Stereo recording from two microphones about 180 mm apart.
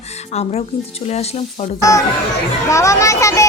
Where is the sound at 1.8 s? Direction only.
15° left (ahead or behind).